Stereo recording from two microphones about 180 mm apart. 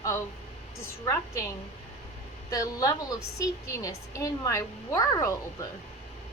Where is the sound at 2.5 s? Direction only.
20° left (ahead or behind).